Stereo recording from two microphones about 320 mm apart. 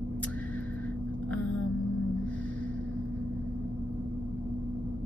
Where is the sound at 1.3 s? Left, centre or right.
Left.